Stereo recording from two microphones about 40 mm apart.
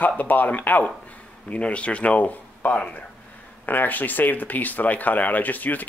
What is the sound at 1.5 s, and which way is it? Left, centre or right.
Speech, left.